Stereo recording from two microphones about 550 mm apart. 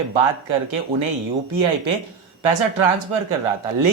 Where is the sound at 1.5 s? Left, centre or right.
Right.